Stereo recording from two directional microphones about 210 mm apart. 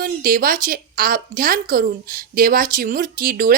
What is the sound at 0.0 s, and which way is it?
A woman's voice, 40° right (ahead or behind).